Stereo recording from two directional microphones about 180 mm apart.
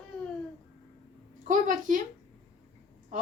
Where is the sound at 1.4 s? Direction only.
45° right (ahead or behind).